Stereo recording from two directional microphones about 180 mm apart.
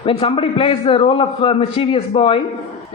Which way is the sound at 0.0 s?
30° left (ahead or behind).